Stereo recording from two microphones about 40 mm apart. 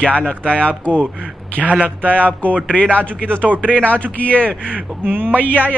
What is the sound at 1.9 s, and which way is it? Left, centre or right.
A man's voice, left.